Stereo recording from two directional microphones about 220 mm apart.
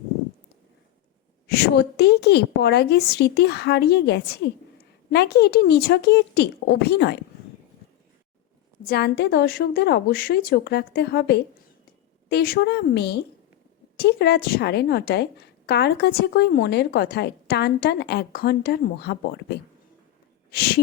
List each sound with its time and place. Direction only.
1.5 s a woman's voice: 50° left (ahead or behind)
8.9 s a woman's voice: 50° left (ahead or behind)